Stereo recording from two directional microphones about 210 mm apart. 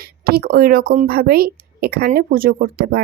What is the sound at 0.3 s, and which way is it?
Speech, 45° right (ahead or behind).